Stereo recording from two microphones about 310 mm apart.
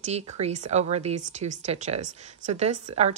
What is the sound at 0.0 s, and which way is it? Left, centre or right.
Speech, right.